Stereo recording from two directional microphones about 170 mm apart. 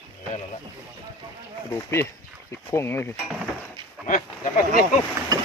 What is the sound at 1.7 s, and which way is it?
Speech, 15° left (ahead or behind).